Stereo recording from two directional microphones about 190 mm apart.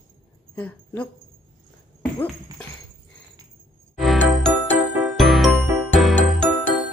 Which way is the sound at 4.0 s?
Centre (ahead or behind).